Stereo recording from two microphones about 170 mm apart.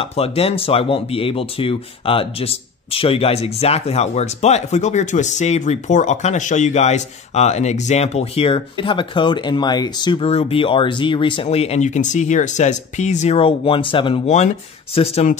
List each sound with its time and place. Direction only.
0.0 s speech: 35° left (ahead or behind)